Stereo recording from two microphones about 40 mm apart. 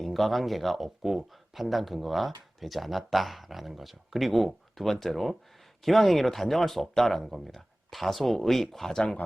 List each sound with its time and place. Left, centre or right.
0.0 s speech: centre